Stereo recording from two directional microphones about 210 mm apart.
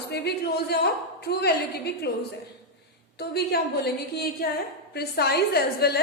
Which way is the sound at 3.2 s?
50° left (ahead or behind).